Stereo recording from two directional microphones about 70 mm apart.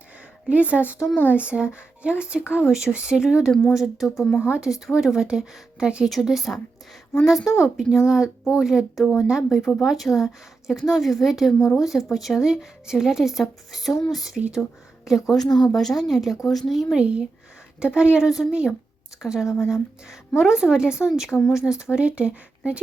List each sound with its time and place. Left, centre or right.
0.4 s speech: centre
3.5 s speech: centre
14.3 s speech: centre
15.0 s speech: centre
15.4 s speech: left
15.7 s speech: centre
17.0 s speech: centre
21.3 s speech: centre
21.7 s speech: centre